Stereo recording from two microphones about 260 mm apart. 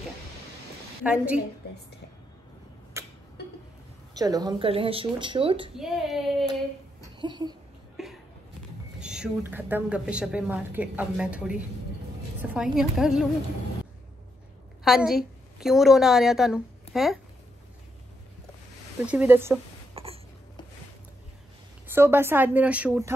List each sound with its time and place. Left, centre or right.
1.0 s a woman's voice: centre
2.9 s tick-tock: centre
4.2 s speech: centre
5.8 s a woman's voice: centre
7.2 s speech: centre
9.0 s a woman's voice: centre
12.7 s a woman's voice: centre
14.9 s a woman's voice: centre
19.0 s speech: centre
20.0 s a sound: right
21.8 s speech: centre